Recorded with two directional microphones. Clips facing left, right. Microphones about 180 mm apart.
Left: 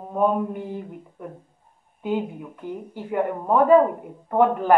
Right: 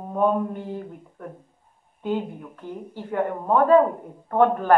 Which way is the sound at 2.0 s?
10° left (ahead or behind).